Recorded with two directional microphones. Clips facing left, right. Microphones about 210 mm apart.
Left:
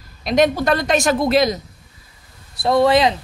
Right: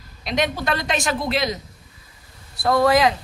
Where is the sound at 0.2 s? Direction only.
45° left (ahead or behind).